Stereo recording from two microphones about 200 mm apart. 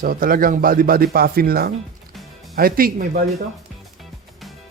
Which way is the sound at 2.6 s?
45° right (ahead or behind).